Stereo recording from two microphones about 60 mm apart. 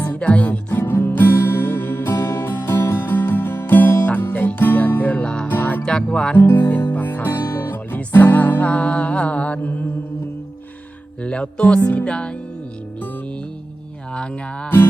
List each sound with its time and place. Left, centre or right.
0.0 s music: left
5.5 s music: left
11.2 s music: centre
14.1 s a sound: centre